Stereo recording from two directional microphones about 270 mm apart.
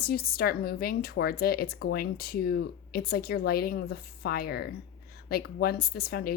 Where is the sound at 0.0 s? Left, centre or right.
Left.